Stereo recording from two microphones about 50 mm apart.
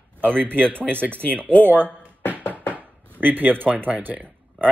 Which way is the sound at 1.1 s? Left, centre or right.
Left.